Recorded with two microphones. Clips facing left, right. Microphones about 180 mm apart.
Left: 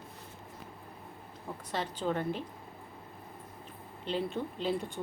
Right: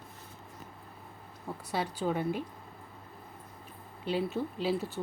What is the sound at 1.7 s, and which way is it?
Speech, 10° right (ahead or behind).